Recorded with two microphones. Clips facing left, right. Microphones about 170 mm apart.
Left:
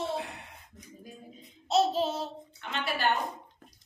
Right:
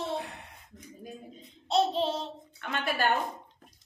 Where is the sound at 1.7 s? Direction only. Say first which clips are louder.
Even; 5° left (ahead or behind).